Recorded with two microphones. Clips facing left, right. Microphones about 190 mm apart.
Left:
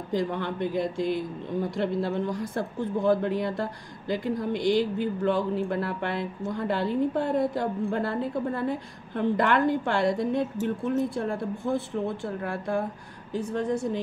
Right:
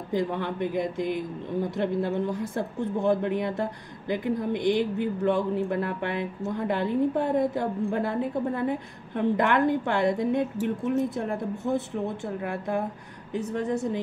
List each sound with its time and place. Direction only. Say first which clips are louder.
0.1 s speech: right 1 dB; 20° right (ahead or behind)